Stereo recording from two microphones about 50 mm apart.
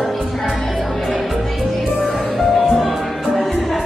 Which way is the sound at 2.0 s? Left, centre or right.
Centre.